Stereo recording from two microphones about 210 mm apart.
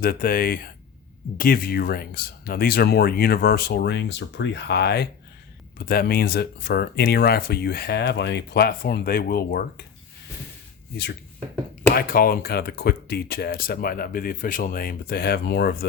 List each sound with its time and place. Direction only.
0.0 s speech: 45° left (ahead or behind)
11.9 s speech: 45° left (ahead or behind)